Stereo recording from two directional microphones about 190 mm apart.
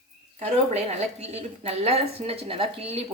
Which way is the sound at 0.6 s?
35° right (ahead or behind).